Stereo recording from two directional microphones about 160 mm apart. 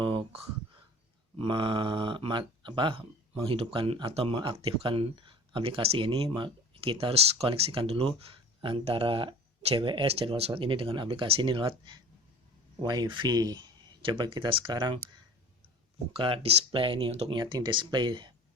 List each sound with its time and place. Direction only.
0.0 s a sound: 35° right (ahead or behind)
1.4 s speech: 30° right (ahead or behind)
16.1 s speech: 35° right (ahead or behind)